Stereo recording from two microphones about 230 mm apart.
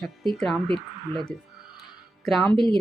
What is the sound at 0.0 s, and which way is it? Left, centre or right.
Speech, centre.